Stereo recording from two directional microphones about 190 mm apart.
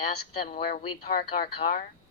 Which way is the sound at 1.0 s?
50° left (ahead or behind).